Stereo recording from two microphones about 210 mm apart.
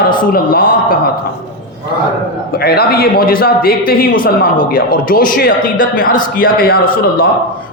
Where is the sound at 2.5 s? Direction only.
45° left (ahead or behind).